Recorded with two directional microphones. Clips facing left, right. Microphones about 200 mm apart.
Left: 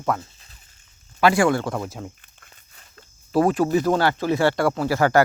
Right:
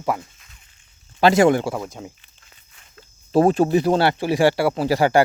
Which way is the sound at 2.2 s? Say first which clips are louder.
Left 2 dB; 50° left (ahead or behind).